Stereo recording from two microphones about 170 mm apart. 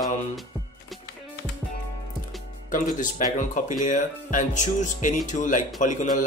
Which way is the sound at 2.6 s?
50° left (ahead or behind).